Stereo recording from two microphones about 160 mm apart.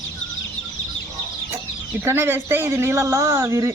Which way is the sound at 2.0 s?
15° right (ahead or behind).